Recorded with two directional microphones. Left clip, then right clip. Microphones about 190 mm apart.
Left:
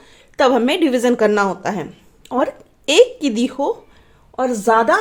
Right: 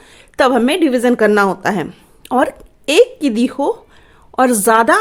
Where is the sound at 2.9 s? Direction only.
20° right (ahead or behind).